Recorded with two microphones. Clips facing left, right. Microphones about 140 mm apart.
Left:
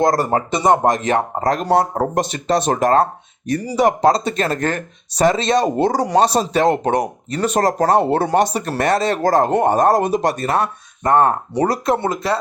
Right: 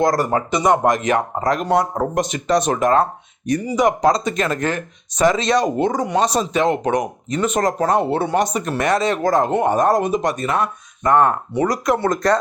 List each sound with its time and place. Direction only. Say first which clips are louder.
0.0 s speech: left 1 dB; 25° left (ahead or behind)
12.0 s speech: right 3 dB; 5° left (ahead or behind)